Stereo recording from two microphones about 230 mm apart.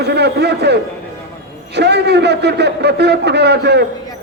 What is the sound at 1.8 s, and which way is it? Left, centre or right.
A man's voice, right.